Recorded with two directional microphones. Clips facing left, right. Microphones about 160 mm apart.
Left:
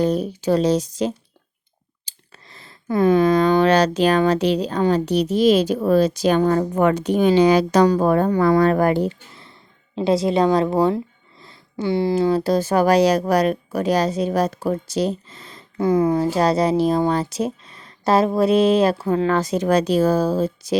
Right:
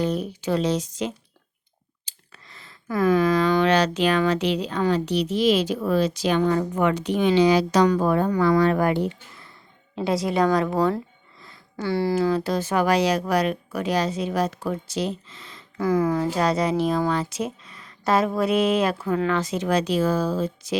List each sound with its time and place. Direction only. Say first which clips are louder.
0.0 s speech: left 5 dB; 40° left (ahead or behind)
9.9 s a woman's voice: left 5 dB; 25° left (ahead or behind)
11.3 s a sound: left 5 dB; 30° left (ahead or behind)
11.9 s speech: left 3 dB; 20° left (ahead or behind); by 15.6 s 40° left (ahead or behind)
15.8 s speech: left 4 dB; 25° left (ahead or behind)